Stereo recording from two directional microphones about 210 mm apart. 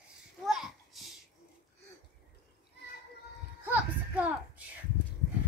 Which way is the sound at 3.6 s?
10° right (ahead or behind).